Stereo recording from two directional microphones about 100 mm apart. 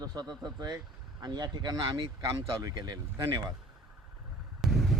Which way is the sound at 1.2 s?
45° right (ahead or behind).